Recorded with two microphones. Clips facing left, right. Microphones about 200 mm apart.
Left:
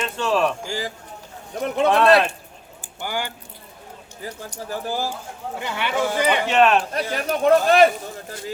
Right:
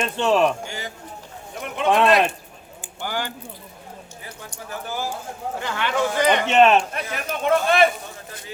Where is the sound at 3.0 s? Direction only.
15° left (ahead or behind).